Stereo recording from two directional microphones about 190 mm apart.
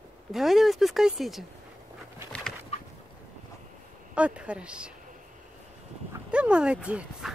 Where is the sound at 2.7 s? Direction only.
35° left (ahead or behind).